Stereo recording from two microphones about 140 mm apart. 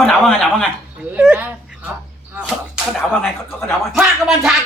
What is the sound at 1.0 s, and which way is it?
Speech, 5° right (ahead or behind).